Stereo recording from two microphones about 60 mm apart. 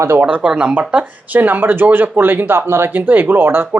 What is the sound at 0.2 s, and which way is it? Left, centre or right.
Speech, right.